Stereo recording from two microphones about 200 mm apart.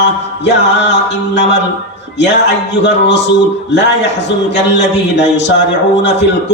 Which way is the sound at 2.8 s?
60° left (ahead or behind).